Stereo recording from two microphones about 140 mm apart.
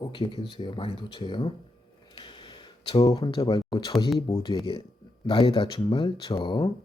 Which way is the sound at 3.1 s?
25° left (ahead or behind).